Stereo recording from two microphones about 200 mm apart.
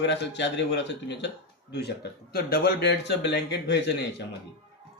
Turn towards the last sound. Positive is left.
turn(degrees=60)  # may be behind; listen again after turning